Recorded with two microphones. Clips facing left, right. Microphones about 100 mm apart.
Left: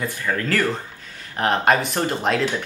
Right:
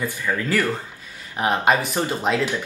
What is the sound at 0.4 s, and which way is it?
Speech, 10° right (ahead or behind).